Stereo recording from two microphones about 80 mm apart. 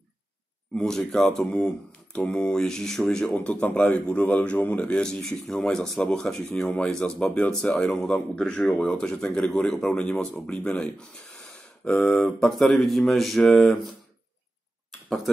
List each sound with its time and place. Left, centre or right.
0.7 s a man's voice: centre
2.1 s a man's voice: centre
3.3 s a man's voice: centre
14.9 s a sound: centre